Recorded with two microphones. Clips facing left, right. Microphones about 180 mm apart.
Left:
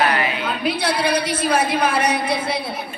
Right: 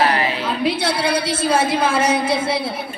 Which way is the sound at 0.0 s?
30° right (ahead or behind).